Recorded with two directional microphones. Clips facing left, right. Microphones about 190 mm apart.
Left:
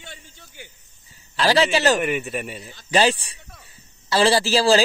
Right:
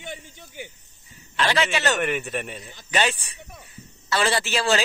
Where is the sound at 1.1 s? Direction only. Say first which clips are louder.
Left 5 dB; 35° left (ahead or behind).